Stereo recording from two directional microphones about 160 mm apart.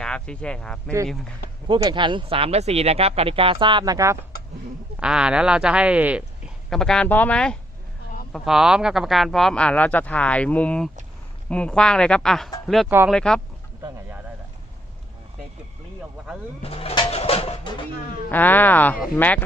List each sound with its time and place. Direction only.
0.0 s speech: 5° left (ahead or behind)
1.6 s speech: 30° right (ahead or behind)
4.9 s speech: 5° right (ahead or behind)
16.6 s speech: 35° left (ahead or behind)
18.3 s speech: 10° left (ahead or behind)